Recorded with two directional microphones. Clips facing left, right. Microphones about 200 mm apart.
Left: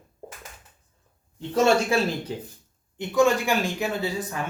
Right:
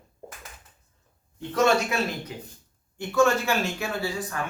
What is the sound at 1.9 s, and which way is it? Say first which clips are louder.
Speech: left 5 dB; 30° left (ahead or behind).